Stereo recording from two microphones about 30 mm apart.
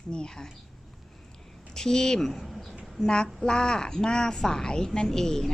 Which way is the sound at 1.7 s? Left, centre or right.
Centre.